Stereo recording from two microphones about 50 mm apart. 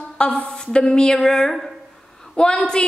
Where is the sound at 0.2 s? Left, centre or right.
Centre.